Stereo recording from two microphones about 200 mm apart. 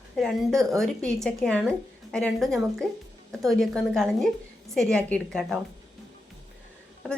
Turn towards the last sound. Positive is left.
turn(degrees=0)  # may be behind; listen again after turning